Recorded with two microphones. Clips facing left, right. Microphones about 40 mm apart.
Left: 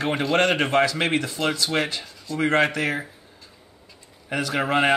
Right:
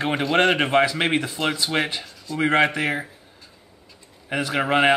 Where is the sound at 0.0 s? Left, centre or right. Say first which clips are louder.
Right 1 dB; centre.